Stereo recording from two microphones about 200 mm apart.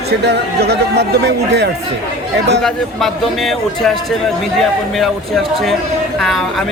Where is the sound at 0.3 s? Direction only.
55° right (ahead or behind).